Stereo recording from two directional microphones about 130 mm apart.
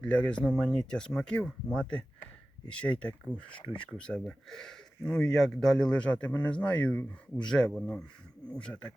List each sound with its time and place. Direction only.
0.0 s speech: 10° left (ahead or behind)